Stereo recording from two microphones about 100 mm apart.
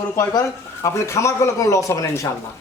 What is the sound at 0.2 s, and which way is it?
Speech, 30° left (ahead or behind).